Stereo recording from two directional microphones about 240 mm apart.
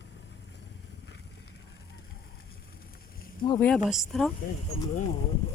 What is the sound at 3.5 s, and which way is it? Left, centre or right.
Speech, centre.